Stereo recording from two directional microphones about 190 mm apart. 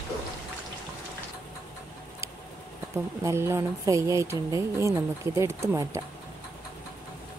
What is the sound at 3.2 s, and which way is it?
Speech, 15° right (ahead or behind).